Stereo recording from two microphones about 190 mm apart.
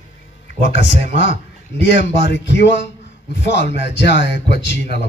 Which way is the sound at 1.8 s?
65° left (ahead or behind).